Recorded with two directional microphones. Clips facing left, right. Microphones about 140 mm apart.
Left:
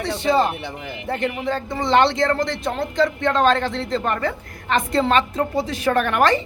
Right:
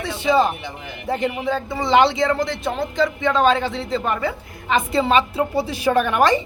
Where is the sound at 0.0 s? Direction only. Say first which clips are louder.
Right 1 dB; centre (ahead or behind).